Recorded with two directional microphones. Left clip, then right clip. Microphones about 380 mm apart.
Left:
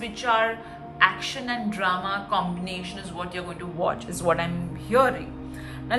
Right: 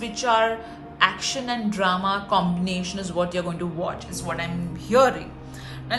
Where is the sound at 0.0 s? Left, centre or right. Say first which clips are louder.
Right 2 dB; centre.